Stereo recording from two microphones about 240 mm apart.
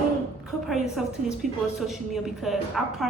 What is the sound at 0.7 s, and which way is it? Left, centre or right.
A woman's voice, centre.